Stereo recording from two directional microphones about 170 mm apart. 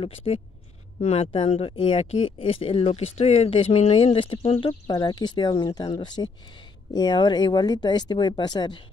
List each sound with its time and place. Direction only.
0.0 s speech: 35° left (ahead or behind)